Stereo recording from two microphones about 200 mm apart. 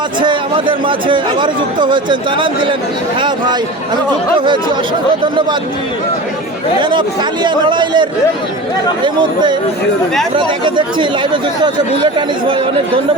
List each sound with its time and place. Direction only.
0.2 s speech: 25° right (ahead or behind)
7.4 s speech: 25° right (ahead or behind)
10.3 s speech: 25° right (ahead or behind)